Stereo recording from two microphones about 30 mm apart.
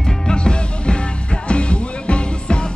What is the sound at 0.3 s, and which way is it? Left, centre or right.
Music, left.